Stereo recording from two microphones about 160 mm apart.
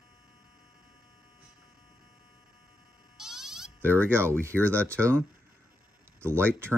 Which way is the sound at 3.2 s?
5° right (ahead or behind).